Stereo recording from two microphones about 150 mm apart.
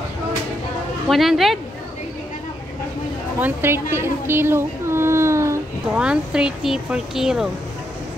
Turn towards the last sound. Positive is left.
turn(degrees=-5)  # may be behind; listen again after turning